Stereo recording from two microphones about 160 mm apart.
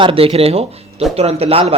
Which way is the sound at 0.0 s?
35° right (ahead or behind).